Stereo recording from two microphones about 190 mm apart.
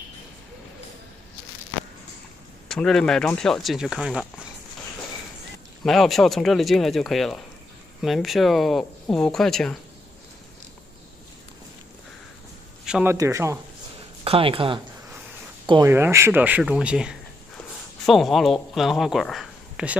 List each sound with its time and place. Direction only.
2.7 s speech: 5° left (ahead or behind)
5.9 s speech: centre (ahead or behind)
12.8 s speech: 5° right (ahead or behind)
14.2 s speech: 30° right (ahead or behind)
15.9 s speech: 15° right (ahead or behind)